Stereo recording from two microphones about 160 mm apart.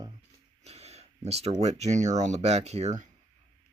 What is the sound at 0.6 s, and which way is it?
Speech, 40° right (ahead or behind).